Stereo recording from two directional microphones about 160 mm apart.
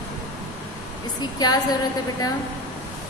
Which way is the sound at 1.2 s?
25° left (ahead or behind).